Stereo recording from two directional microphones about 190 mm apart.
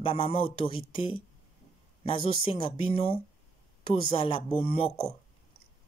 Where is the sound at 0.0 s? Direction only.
30° left (ahead or behind).